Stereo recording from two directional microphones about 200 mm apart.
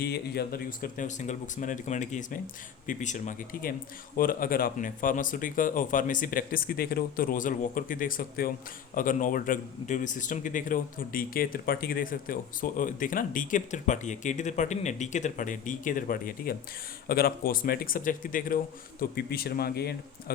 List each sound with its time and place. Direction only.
0.0 s a man's voice: 50° left (ahead or behind)